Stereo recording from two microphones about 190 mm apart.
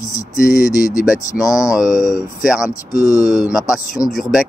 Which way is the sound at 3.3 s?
5° right (ahead or behind).